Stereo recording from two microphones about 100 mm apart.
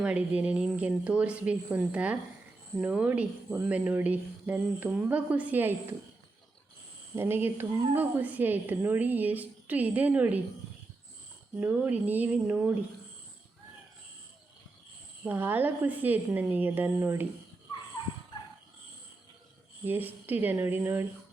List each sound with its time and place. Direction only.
0.0 s a woman's voice: 15° right (ahead or behind)
7.2 s a woman's voice: 20° right (ahead or behind)
11.6 s a woman's voice: 15° right (ahead or behind)
15.2 s a woman's voice: 20° right (ahead or behind)
19.8 s a woman's voice: 20° right (ahead or behind)